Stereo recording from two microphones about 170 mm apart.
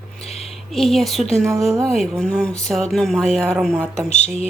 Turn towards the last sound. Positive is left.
turn(degrees=40)  # may be behind; listen again after turning